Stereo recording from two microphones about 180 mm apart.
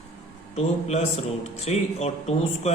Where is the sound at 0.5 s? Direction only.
35° left (ahead or behind).